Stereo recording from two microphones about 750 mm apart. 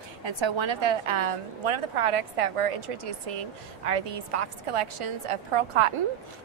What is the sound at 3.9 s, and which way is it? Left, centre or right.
A woman's voice, right.